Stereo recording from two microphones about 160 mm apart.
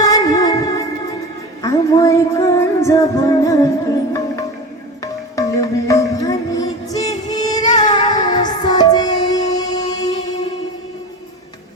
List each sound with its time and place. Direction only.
0.0 s music: 25° left (ahead or behind)
5.4 s music: 20° left (ahead or behind)